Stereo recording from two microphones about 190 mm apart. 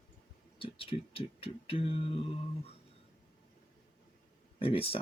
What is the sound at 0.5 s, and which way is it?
Speech, 30° left (ahead or behind).